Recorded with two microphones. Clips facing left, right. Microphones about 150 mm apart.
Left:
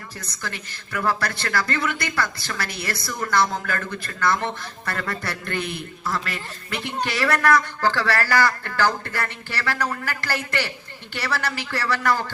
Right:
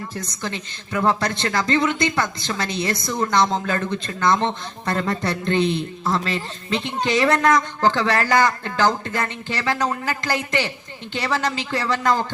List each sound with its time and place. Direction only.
0.4 s a man's voice: 25° right (ahead or behind)